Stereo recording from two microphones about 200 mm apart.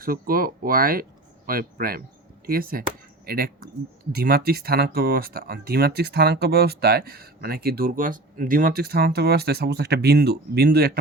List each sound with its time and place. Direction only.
0.0 s speech: 45° right (ahead or behind)